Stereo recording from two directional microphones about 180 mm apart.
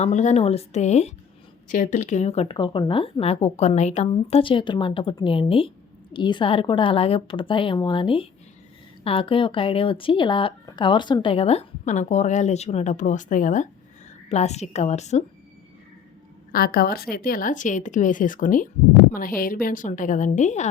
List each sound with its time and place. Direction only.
0.0 s speech: 40° left (ahead or behind)
16.5 s speech: 55° left (ahead or behind)